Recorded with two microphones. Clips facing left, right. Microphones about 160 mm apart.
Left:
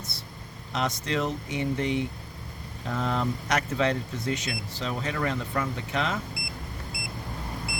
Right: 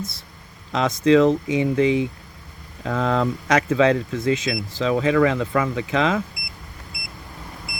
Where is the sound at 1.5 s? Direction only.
90° right.